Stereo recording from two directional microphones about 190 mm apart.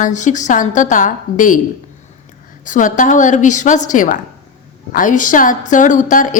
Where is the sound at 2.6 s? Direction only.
40° left (ahead or behind).